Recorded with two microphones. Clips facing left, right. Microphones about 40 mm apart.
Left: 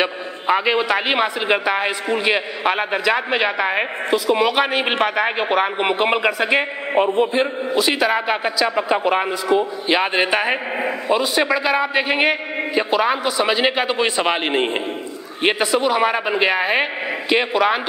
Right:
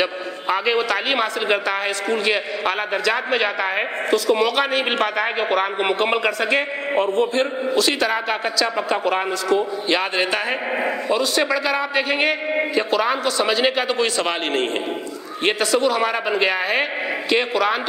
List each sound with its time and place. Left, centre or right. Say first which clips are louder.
0.0 s a man's voice: left 1 dB; centre